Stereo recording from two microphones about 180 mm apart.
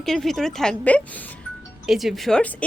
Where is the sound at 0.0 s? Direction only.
Centre (ahead or behind).